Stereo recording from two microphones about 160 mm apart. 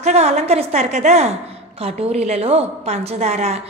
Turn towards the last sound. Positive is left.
turn(degrees=-40)  # may be behind; listen again after turning